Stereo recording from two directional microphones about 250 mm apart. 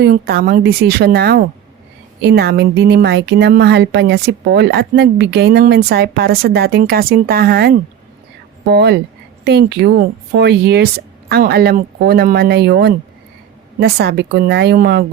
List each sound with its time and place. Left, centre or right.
0.0 s speech: right